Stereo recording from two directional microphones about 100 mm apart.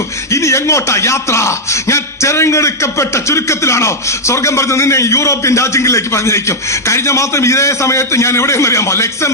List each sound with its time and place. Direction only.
0.3 s a man's voice: 30° left (ahead or behind)